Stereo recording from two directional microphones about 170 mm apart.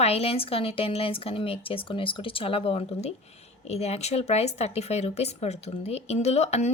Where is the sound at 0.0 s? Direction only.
35° left (ahead or behind).